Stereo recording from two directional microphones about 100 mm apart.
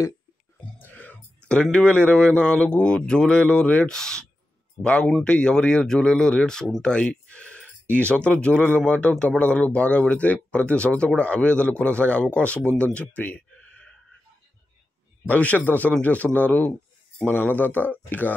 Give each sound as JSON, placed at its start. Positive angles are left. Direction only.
{"t": 0.7, "sound": "speech", "side_deg": 15}
{"t": 15.2, "sound": "speech", "side_deg": 15}